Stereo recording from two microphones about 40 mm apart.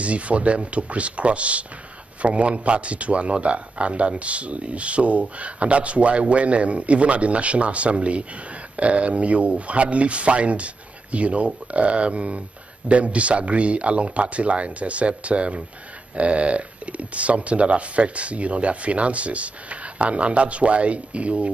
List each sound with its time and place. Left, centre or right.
0.0 s speech: right